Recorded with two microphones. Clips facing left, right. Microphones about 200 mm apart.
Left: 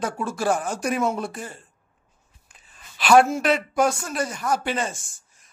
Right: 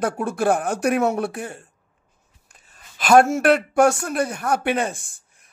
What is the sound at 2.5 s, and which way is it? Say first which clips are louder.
Speech: even; 45° right (ahead or behind).